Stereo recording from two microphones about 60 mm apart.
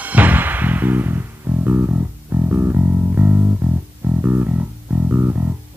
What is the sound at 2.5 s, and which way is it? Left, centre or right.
Music, right.